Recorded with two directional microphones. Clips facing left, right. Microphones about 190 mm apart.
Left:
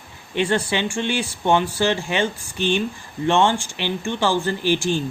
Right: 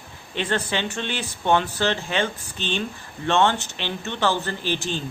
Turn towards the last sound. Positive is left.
turn(degrees=10)  # may be behind; listen again after turning